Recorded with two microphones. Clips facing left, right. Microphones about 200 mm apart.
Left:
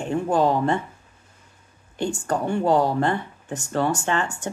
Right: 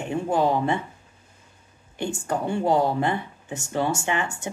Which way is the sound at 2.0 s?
15° right (ahead or behind).